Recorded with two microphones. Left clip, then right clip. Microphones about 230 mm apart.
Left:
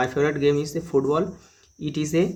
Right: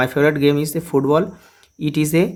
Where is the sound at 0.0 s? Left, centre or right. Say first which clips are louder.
Right 5 dB; right.